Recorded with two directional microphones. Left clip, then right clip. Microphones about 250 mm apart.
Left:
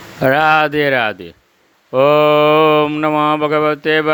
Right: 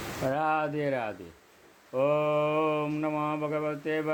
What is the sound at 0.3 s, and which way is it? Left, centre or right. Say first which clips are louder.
Speech: left 16 dB; left.